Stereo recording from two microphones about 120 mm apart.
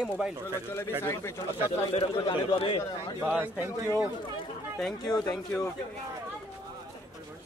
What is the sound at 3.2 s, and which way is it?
Speech, 15° right (ahead or behind).